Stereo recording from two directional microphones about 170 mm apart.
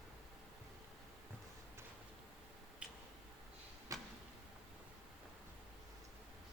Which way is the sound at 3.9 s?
20° right (ahead or behind).